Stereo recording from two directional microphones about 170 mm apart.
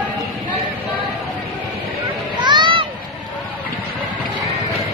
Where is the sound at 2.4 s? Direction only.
25° right (ahead or behind).